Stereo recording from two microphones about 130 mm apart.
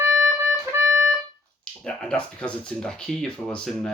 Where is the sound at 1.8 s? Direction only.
5° left (ahead or behind).